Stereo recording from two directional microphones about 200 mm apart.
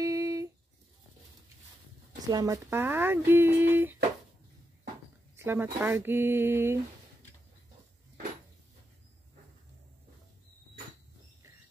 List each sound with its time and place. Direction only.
0.0 s a sound: 15° right (ahead or behind)
2.1 s speech: 20° right (ahead or behind)
5.3 s speech: 10° right (ahead or behind)